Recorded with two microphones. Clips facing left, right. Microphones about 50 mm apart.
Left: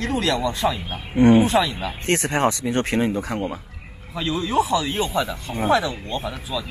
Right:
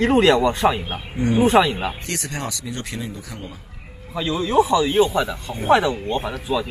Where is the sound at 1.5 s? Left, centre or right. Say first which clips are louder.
Right 4 dB; right.